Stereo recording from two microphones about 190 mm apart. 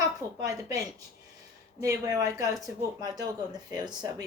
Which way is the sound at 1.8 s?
15° right (ahead or behind).